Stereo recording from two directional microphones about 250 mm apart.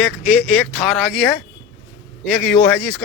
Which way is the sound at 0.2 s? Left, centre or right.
Centre.